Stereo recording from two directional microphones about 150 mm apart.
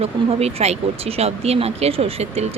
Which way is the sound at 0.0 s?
45° right (ahead or behind).